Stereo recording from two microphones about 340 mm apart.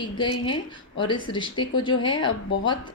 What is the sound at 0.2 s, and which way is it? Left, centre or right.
A woman's voice, centre.